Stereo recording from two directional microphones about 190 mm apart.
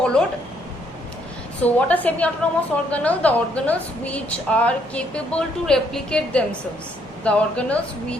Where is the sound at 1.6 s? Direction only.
5° left (ahead or behind).